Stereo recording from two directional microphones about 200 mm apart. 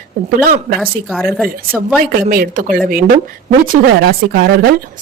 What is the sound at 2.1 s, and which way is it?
Speech, 45° right (ahead or behind).